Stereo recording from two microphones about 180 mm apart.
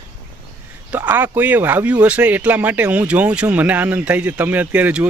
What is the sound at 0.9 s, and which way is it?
Speech, 10° right (ahead or behind).